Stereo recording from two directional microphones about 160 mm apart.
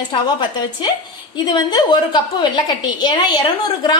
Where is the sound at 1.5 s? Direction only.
25° left (ahead or behind).